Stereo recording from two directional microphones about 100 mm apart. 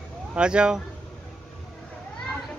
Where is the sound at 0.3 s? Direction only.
10° right (ahead or behind).